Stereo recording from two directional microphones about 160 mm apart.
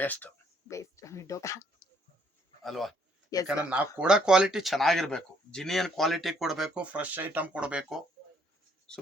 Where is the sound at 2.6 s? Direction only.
Centre (ahead or behind).